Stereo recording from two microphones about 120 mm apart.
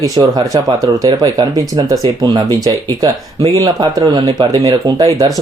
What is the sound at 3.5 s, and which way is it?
Speech, 30° right (ahead or behind).